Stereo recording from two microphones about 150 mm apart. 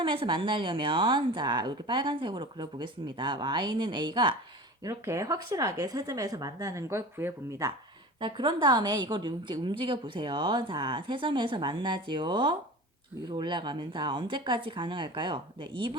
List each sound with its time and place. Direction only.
0.0 s speech: 35° right (ahead or behind)
4.8 s speech: 20° right (ahead or behind)
8.2 s speech: 30° right (ahead or behind)